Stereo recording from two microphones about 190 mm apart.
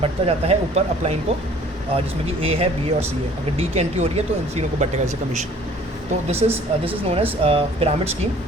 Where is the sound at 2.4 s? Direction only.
30° right (ahead or behind).